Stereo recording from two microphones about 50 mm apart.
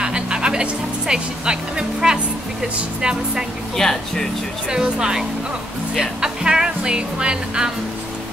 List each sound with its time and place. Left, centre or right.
0.0 s music: centre
3.0 s speech: centre
3.7 s speech: centre
4.6 s speech: centre